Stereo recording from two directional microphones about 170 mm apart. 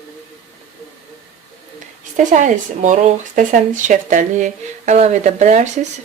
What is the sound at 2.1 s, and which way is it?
Speech, 50° right (ahead or behind).